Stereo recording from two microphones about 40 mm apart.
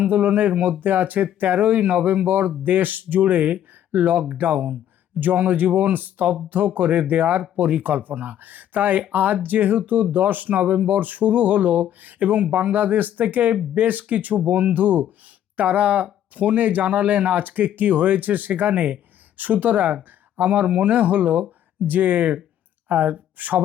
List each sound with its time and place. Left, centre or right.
0.0 s speech: right